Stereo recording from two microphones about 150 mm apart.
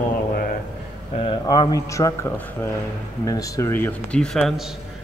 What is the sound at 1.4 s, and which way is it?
A man's voice, 25° left (ahead or behind).